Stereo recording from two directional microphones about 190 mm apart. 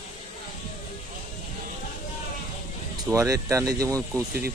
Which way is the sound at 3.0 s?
15° right (ahead or behind).